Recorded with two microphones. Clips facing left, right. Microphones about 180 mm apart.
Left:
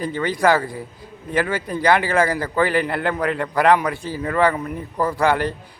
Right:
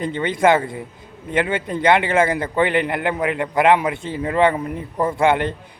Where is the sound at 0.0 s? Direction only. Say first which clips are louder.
Right 1 dB; 25° right (ahead or behind).